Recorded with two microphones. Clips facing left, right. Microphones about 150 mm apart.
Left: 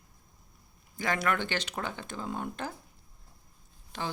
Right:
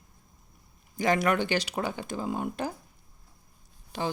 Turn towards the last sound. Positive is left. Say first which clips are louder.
# right 5 dB
turn(degrees=-15)  # may be behind; listen again after turning